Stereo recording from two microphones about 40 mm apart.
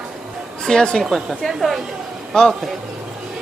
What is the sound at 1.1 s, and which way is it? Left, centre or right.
Speech, centre.